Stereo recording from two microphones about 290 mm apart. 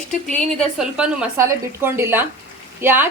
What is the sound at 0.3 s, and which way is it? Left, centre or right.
A woman's voice, centre.